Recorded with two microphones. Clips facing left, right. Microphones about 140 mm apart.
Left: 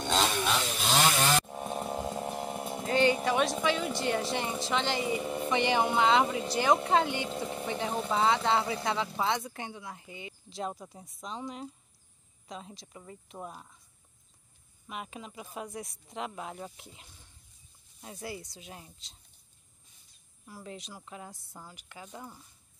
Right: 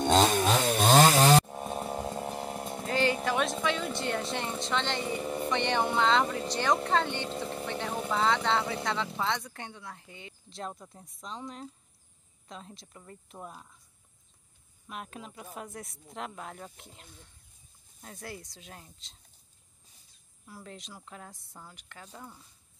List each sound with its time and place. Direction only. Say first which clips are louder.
0.0 s chainsaw: right 5 dB; 45° right (ahead or behind)
1.4 s speech: even; centre (ahead or behind)
14.9 s speech: left 1 dB; centre (ahead or behind)
20.4 s speech: left 2 dB; centre (ahead or behind)